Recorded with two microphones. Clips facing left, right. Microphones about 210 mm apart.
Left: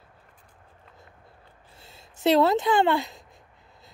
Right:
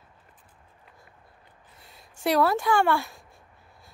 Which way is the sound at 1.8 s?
25° left (ahead or behind).